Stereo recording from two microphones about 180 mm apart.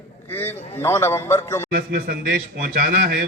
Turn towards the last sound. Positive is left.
turn(degrees=-55)  # may be behind; listen again after turning